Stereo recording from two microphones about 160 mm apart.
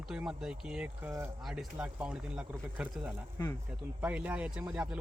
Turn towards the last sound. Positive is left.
turn(degrees=-10)  # may be behind; listen again after turning